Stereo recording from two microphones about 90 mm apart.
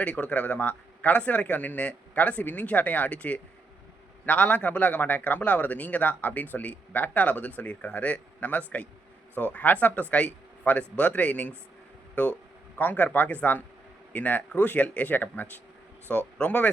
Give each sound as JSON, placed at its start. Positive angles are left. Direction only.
{"t": 0.0, "sound": "a man's voice", "side_deg": 15}